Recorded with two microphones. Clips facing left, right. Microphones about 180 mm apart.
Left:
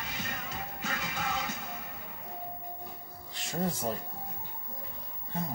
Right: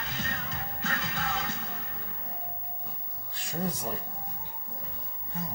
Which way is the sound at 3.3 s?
25° left (ahead or behind).